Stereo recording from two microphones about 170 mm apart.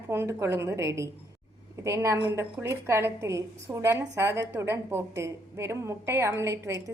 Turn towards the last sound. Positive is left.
turn(degrees=-20)  # may be behind; listen again after turning